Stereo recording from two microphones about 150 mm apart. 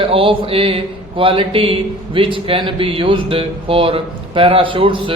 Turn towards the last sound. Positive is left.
turn(degrees=-35)  # may be behind; listen again after turning